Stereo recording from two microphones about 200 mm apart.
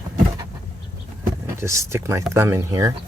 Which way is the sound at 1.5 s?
15° right (ahead or behind).